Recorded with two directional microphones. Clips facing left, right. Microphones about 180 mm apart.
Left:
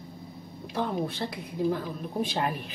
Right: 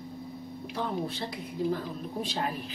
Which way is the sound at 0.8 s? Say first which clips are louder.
Left 3 dB; 60° left (ahead or behind).